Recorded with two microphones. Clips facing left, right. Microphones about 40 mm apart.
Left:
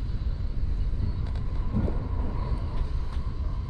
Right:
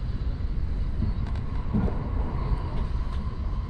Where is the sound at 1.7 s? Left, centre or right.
Centre.